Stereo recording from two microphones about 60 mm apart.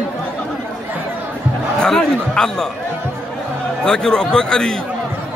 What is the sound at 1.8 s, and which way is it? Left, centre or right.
Speech, centre.